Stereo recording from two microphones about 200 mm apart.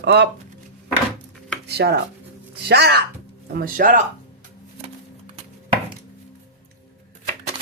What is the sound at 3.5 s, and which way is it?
Speech, 45° right (ahead or behind).